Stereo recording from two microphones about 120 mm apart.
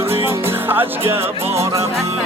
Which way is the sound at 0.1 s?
20° right (ahead or behind).